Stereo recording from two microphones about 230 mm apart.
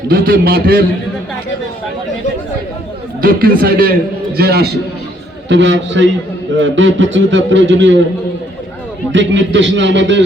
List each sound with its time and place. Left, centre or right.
0.1 s a man's voice: right
3.2 s a man's voice: right
9.1 s a man's voice: right